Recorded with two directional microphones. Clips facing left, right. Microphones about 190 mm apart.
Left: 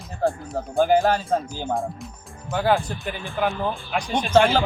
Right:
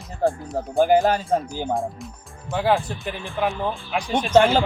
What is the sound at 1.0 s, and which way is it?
Speech, 15° right (ahead or behind).